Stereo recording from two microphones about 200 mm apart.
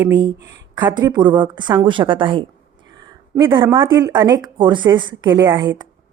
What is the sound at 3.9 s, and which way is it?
A woman's voice, 15° right (ahead or behind).